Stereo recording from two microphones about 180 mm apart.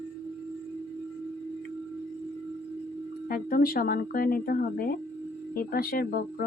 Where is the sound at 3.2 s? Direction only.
55° left (ahead or behind).